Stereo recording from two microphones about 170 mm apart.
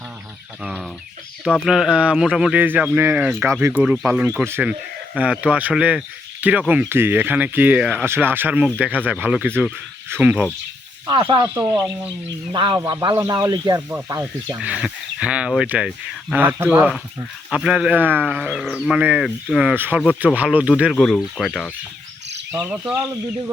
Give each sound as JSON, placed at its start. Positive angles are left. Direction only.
{"t": 0.6, "sound": "speech", "side_deg": -5}
{"t": 11.0, "sound": "speech", "side_deg": -25}
{"t": 14.6, "sound": "speech", "side_deg": -5}